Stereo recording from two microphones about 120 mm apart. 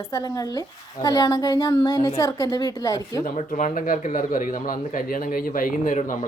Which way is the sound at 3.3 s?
90° left.